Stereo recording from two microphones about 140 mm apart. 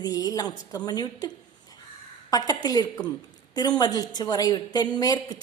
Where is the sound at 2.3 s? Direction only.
25° left (ahead or behind).